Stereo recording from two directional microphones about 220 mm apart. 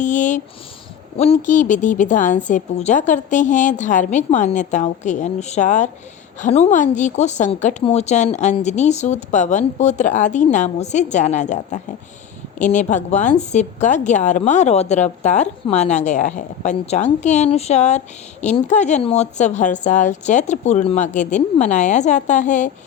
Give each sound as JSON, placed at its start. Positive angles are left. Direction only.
{"t": 0.0, "sound": "a woman's voice", "side_deg": 35}